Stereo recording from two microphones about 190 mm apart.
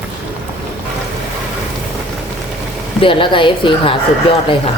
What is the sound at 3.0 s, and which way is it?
Speech, 25° left (ahead or behind).